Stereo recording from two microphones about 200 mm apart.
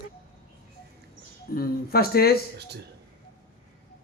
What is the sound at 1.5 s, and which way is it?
Speech, 50° left (ahead or behind).